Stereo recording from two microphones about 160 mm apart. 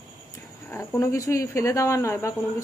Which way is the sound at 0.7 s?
20° left (ahead or behind).